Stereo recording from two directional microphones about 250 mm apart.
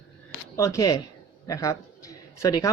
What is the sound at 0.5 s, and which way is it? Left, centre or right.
Speech, centre.